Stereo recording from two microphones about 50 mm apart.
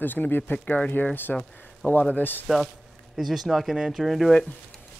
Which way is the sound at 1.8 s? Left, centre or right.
Centre.